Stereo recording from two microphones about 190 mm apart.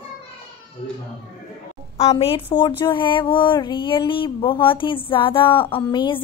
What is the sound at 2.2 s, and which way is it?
Speech, 30° left (ahead or behind).